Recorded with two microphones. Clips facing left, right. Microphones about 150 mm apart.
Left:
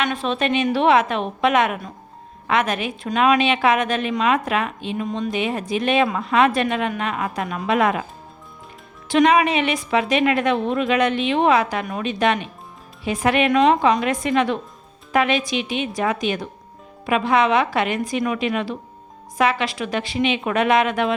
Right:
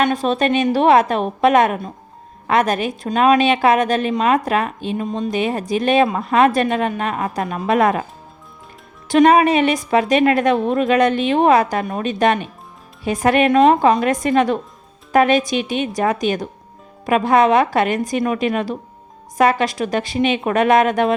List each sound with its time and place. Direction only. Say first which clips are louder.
0.0 s a woman's voice: right 5 dB; 40° right (ahead or behind)
9.0 s a woman's voice: right 4 dB; 45° right (ahead or behind)